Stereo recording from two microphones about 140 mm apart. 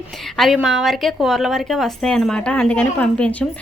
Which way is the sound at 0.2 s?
Centre (ahead or behind).